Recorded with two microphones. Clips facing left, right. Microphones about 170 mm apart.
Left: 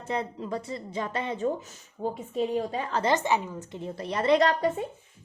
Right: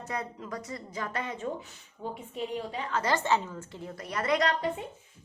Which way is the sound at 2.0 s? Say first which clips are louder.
Left 7 dB; 40° left (ahead or behind).